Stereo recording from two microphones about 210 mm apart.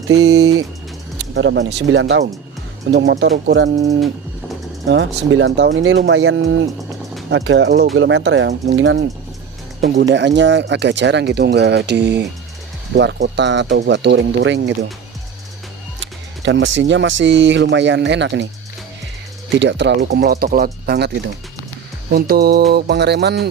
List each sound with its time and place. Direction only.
0.1 s speech: 90° right
1.3 s speech: 60° right (ahead or behind)
4.9 s speech: 60° right (ahead or behind)
9.8 s speech: 35° right (ahead or behind)
10.1 s speech: 55° right (ahead or behind)
16.0 s speech: 60° right (ahead or behind)
19.5 s speech: 55° right (ahead or behind)
22.1 s speech: 50° right (ahead or behind)